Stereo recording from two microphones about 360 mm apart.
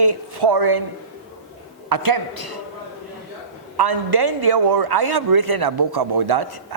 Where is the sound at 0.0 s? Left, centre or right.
Right.